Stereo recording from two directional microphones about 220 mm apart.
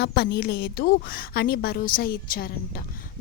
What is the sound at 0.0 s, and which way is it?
A woman's voice, 45° left (ahead or behind).